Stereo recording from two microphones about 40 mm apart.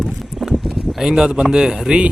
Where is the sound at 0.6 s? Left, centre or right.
Centre.